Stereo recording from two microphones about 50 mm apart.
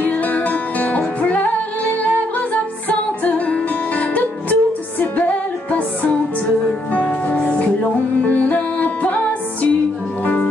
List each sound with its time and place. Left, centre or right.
0.0 s music: left
2.9 s music: left